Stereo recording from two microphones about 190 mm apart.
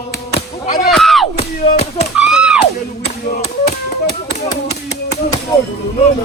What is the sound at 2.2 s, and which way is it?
Music, 5° right (ahead or behind).